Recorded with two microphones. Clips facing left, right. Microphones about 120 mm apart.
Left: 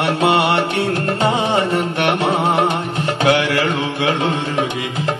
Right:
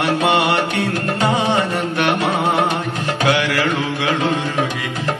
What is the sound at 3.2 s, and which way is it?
Music, 25° left (ahead or behind).